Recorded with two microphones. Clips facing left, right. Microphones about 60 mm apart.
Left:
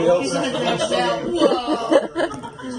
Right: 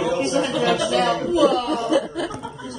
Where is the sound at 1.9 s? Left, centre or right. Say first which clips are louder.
Left 4 dB; left.